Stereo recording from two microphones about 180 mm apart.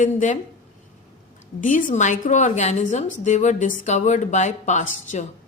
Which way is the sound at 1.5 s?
45° left (ahead or behind).